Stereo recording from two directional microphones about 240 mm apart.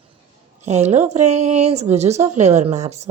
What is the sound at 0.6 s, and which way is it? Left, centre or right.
A woman's voice, right.